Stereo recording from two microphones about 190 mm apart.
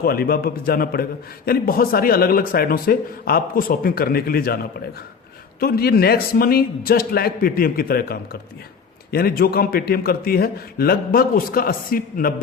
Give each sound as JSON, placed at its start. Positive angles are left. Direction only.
{"t": 0.0, "sound": "a man's voice", "side_deg": 55}